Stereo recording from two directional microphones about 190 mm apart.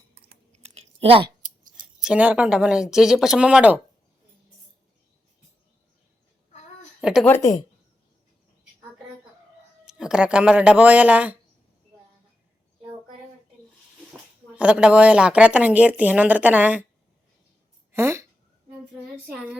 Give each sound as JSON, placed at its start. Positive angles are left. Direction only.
{"t": 0.5, "sound": "chewing", "side_deg": -35}
{"t": 1.2, "sound": "scissors", "side_deg": -45}
{"t": 2.0, "sound": "speech", "side_deg": -5}
{"t": 7.0, "sound": "speech", "side_deg": 0}
{"t": 7.3, "sound": "a woman's voice", "side_deg": 15}
{"t": 9.8, "sound": "a woman's voice", "side_deg": -5}
{"t": 14.5, "sound": "a woman's voice", "side_deg": -5}
{"t": 17.9, "sound": "speech", "side_deg": -15}
{"t": 19.3, "sound": "speech", "side_deg": -5}